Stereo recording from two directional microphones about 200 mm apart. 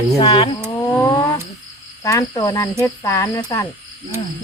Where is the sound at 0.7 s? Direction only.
15° left (ahead or behind).